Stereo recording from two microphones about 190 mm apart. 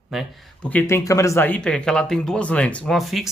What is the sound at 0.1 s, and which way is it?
Speech, centre (ahead or behind).